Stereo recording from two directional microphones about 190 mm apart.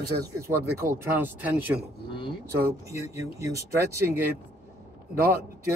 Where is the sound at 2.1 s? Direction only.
25° left (ahead or behind).